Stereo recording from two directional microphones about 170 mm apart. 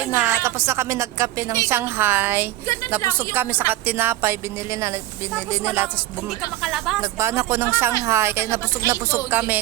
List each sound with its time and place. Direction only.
0.1 s a woman's voice: 15° right (ahead or behind)
6.6 s speech: centre (ahead or behind)
7.0 s a woman's voice: 15° right (ahead or behind)